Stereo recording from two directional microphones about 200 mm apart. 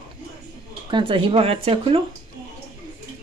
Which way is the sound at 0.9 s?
25° right (ahead or behind).